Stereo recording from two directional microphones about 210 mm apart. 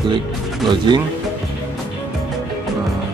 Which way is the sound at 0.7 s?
20° right (ahead or behind).